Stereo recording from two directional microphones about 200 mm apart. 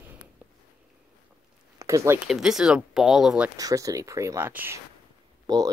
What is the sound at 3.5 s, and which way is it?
Speech, 15° right (ahead or behind).